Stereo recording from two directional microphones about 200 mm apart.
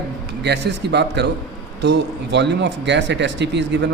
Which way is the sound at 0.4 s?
55° right (ahead or behind).